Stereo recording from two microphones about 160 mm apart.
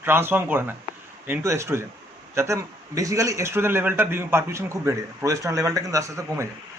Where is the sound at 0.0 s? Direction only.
15° right (ahead or behind).